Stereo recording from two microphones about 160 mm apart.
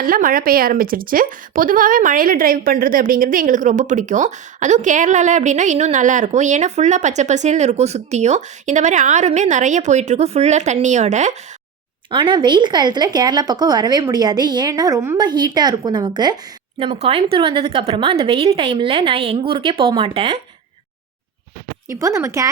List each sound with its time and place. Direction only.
0.0 s speech: 60° right (ahead or behind); by 11.3 s 45° right (ahead or behind)
12.1 s speech: 30° right (ahead or behind)
16.7 s a woman's voice: 35° right (ahead or behind)
21.8 s speech: 20° right (ahead or behind)